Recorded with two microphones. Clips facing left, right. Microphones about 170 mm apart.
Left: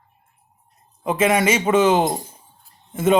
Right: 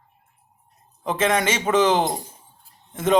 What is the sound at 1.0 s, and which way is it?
Speech, 10° left (ahead or behind).